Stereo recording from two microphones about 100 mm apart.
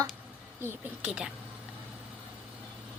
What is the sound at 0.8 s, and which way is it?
Speech, 10° right (ahead or behind).